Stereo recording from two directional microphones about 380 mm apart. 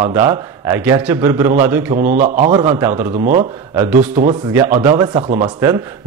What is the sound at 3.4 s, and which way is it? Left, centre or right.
A man's voice, centre.